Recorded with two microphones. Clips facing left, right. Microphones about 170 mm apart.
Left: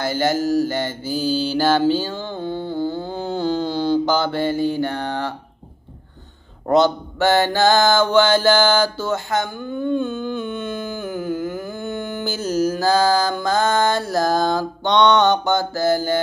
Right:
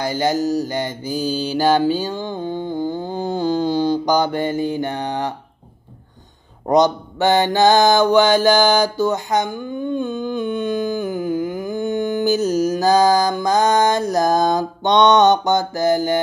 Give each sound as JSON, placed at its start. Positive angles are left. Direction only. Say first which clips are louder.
{"t": 0.0, "sound": "mantra", "louder": "right 1 dB", "side_deg": -15}
{"t": 6.7, "sound": "mantra", "louder": "right 1 dB", "side_deg": -15}